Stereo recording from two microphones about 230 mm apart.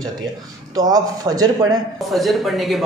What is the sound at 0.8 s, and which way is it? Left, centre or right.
Speech, centre.